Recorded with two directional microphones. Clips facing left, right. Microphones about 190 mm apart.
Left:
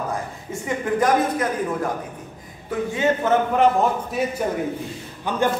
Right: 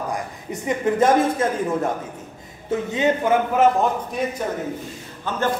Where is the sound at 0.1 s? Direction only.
20° right (ahead or behind).